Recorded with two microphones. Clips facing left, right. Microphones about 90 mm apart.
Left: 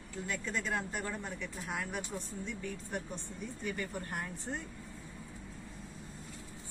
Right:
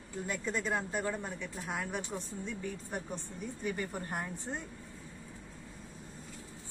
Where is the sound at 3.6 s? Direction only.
25° right (ahead or behind).